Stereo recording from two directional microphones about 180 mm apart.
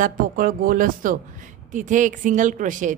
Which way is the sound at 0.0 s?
50° right (ahead or behind).